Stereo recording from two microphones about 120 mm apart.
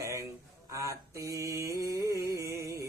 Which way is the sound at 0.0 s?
25° right (ahead or behind).